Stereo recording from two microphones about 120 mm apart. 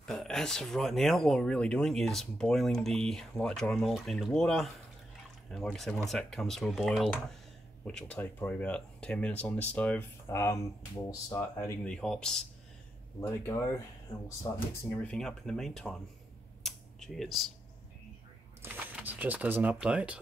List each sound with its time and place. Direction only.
0.0 s speech: 5° left (ahead or behind)
7.8 s speech: 10° left (ahead or behind)
10.2 s speech: 25° left (ahead or behind)
11.8 s speech: 5° left (ahead or behind)
13.2 s speech: 20° left (ahead or behind)
15.0 s speech: 5° left (ahead or behind)
16.6 s a sound: centre (ahead or behind)
18.6 s speech: 15° right (ahead or behind)